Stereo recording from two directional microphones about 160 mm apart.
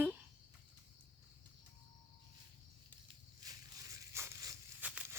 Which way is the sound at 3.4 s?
20° right (ahead or behind).